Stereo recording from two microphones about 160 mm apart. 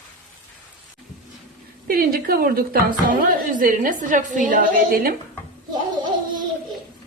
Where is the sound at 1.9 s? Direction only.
65° right (ahead or behind).